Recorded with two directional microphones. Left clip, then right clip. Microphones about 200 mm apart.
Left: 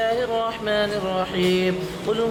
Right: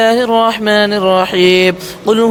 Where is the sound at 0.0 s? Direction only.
55° right (ahead or behind).